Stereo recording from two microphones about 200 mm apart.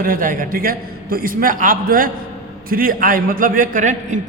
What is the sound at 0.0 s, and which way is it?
A man's voice, 45° right (ahead or behind).